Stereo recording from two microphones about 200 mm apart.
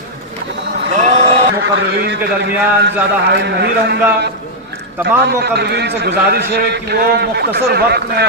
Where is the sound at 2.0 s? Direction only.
60° right (ahead or behind).